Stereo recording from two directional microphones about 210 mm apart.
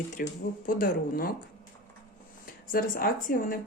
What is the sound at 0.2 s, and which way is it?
Speech, 40° left (ahead or behind).